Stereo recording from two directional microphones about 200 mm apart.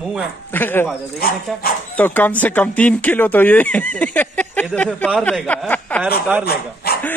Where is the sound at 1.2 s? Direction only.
50° left (ahead or behind).